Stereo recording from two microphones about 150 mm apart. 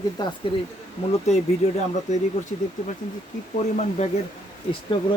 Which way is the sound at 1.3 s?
45° left (ahead or behind).